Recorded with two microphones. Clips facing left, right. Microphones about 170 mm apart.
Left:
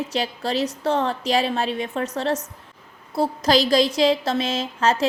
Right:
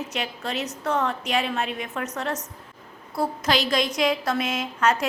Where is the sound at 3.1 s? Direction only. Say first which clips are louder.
Left 5 dB; 30° left (ahead or behind).